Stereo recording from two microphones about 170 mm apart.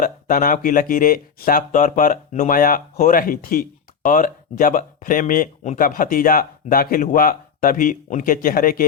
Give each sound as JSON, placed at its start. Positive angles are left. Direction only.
{"t": 0.0, "sound": "speech", "side_deg": 55}